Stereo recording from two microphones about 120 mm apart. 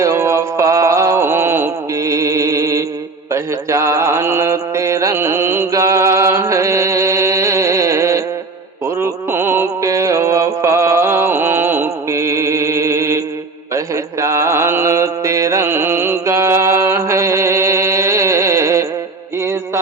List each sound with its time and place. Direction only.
0.0 s mantra: 25° right (ahead or behind)
9.0 s music: 20° right (ahead or behind)
13.7 s mantra: 25° right (ahead or behind)
19.4 s music: 20° right (ahead or behind)